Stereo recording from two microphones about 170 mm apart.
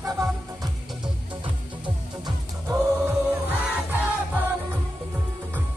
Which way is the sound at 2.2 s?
20° right (ahead or behind).